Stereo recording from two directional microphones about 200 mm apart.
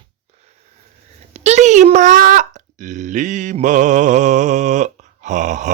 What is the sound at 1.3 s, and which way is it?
Speech, 35° right (ahead or behind).